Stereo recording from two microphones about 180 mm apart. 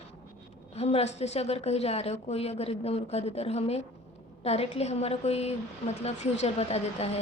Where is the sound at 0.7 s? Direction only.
35° left (ahead or behind).